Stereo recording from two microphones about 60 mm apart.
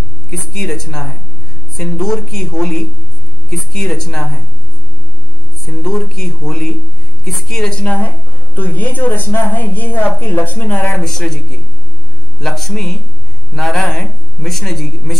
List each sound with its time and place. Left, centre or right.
0.3 s a man's voice: centre
5.7 s a man's voice: centre
7.8 s speech: left
11.0 s a man's voice: centre